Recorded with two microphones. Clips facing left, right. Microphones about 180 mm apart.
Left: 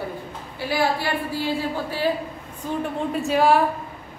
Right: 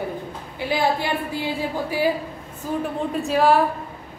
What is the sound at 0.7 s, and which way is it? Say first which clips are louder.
A woman's voice: right 1 dB; 20° right (ahead or behind).